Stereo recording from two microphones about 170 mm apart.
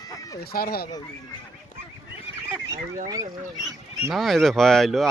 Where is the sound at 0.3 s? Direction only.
65° left (ahead or behind).